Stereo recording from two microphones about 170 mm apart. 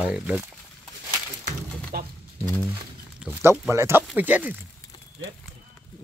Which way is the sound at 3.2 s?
15° right (ahead or behind).